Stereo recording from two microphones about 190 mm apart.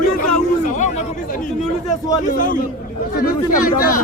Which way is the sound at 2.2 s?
45° left (ahead or behind).